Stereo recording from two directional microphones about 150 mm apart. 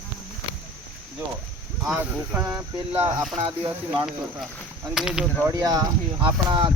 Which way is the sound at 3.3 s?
40° right (ahead or behind).